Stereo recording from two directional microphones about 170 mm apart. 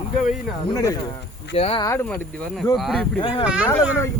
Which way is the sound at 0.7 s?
20° left (ahead or behind).